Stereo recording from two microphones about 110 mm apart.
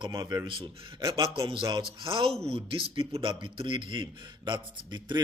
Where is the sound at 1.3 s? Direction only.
50° right (ahead or behind).